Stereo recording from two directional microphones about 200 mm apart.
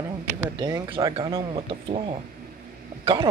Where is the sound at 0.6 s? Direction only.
20° right (ahead or behind).